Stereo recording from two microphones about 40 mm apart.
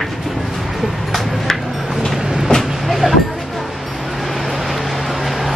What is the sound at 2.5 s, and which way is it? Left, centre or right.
Train, left.